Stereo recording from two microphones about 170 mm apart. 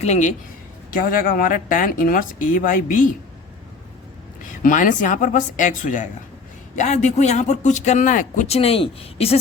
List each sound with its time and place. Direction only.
0.0 s speech: 45° left (ahead or behind)
0.9 s speech: 55° left (ahead or behind)
4.4 s speech: 50° left (ahead or behind); by 9.4 s 35° left (ahead or behind)